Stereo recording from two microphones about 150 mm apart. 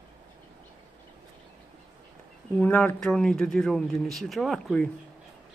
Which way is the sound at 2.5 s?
10° left (ahead or behind).